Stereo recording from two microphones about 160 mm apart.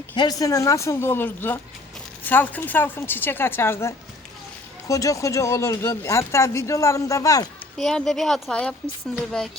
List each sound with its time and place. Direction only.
0.2 s a woman's voice: 25° left (ahead or behind)
7.8 s speech: centre (ahead or behind)